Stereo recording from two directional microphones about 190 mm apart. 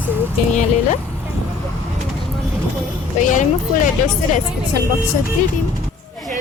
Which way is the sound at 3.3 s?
40° left (ahead or behind).